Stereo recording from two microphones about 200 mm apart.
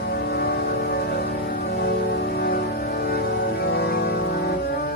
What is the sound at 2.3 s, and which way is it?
Music, 50° left (ahead or behind).